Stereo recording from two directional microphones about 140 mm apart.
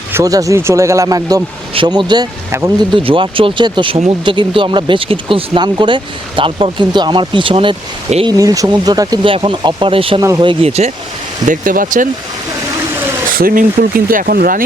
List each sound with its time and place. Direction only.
0.1 s speech: 20° right (ahead or behind)
1.7 s speech: 35° right (ahead or behind)
2.5 s speech: 20° right (ahead or behind)
2.9 s speech: 40° right (ahead or behind)
8.4 s speech: 25° right (ahead or behind)
9.2 s speech: 35° right (ahead or behind)
10.2 s speech: 25° right (ahead or behind); by 10.9 s 50° right (ahead or behind)
11.4 s speech: 75° right (ahead or behind)
13.4 s speech: 90° right